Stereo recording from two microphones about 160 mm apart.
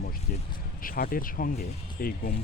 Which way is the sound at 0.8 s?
65° left (ahead or behind).